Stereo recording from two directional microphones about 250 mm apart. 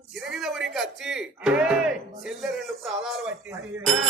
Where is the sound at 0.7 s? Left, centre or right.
Centre.